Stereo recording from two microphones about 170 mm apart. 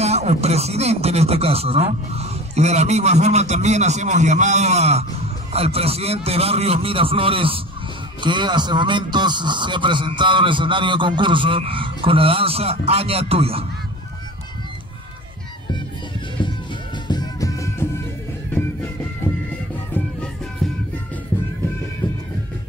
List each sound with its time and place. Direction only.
0.0 s a man's voice: 40° right (ahead or behind)
16.4 s music: 30° left (ahead or behind)
19.9 s music: 5° left (ahead or behind)